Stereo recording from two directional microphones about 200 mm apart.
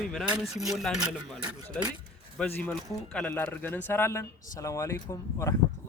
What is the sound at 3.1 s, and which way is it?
Speech, 10° left (ahead or behind).